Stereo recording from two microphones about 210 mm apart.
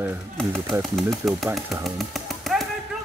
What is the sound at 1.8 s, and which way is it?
Music, centre (ahead or behind).